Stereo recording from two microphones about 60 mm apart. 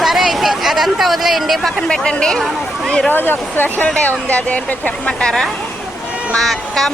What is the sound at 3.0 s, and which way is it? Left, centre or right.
Speech, left.